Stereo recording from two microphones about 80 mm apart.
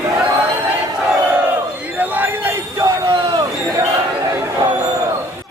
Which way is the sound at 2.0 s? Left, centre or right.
Right.